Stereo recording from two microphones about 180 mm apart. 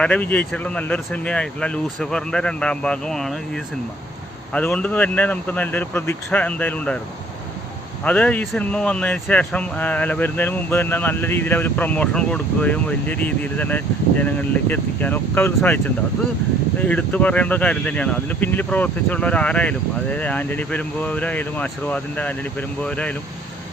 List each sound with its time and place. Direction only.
0.0 s speech: 5° left (ahead or behind)
8.0 s speech: 10° left (ahead or behind)
16.8 s speech: 5° left (ahead or behind)